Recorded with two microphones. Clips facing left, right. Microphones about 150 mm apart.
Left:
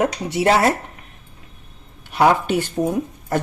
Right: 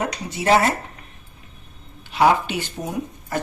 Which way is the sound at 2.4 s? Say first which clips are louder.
Left 7 dB; 50° left (ahead or behind).